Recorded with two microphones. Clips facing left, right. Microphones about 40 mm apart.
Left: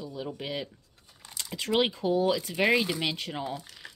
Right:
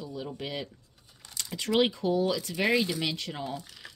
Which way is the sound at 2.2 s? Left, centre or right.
Centre.